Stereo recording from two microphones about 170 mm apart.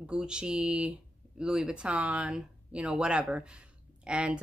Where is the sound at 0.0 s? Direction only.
5° right (ahead or behind).